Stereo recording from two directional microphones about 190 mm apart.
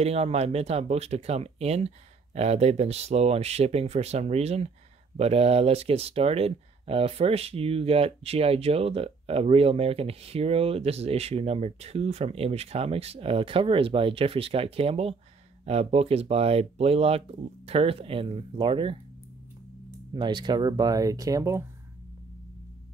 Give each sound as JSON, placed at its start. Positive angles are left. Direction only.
{"t": 0.0, "sound": "speech", "side_deg": -35}
{"t": 20.2, "sound": "speech", "side_deg": -25}